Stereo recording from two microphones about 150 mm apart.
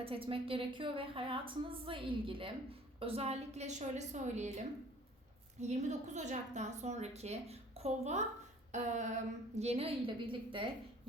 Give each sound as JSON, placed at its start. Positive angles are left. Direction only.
{"t": 0.0, "sound": "a woman's voice", "side_deg": -40}